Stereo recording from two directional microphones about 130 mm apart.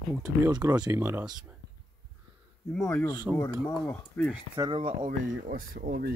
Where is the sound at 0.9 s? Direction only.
20° right (ahead or behind).